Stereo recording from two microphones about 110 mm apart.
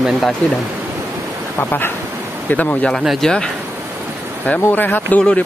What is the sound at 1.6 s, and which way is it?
Speech, 15° left (ahead or behind).